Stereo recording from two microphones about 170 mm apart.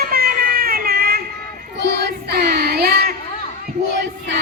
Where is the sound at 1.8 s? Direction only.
75° right (ahead or behind).